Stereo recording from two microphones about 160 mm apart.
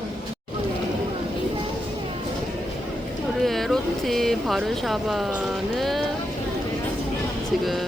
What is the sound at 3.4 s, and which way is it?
Speech, centre (ahead or behind).